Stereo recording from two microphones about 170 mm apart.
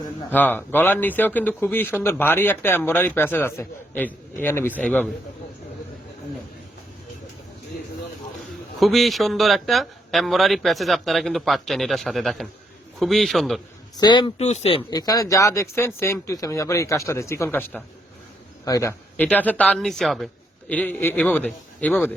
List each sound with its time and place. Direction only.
0.3 s a man's voice: 10° left (ahead or behind)
8.8 s speech: centre (ahead or behind)
13.9 s speech: 25° left (ahead or behind)
14.4 s a man's voice: 40° left (ahead or behind); by 22.1 s 10° left (ahead or behind)